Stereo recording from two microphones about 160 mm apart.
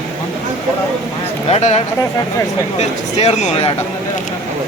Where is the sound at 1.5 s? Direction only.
40° left (ahead or behind).